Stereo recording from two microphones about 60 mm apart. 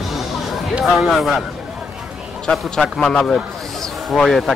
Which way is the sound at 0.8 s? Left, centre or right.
Centre.